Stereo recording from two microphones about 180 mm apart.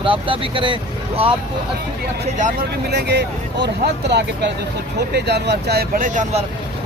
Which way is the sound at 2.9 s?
65° right (ahead or behind).